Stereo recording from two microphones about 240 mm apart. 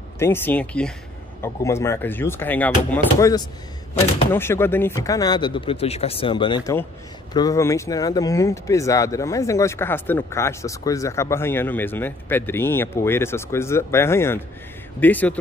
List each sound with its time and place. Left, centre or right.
0.2 s speech: centre